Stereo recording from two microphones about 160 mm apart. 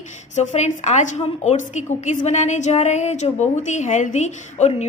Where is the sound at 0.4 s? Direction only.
45° left (ahead or behind).